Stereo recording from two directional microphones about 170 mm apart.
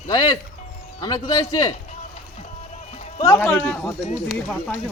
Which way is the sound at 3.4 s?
10° left (ahead or behind).